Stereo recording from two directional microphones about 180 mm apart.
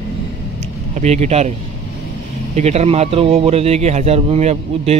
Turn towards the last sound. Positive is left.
turn(degrees=-35)  # may be behind; listen again after turning